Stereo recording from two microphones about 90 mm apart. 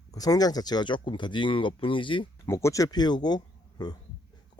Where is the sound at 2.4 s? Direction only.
30° left (ahead or behind); by 3.9 s 50° left (ahead or behind).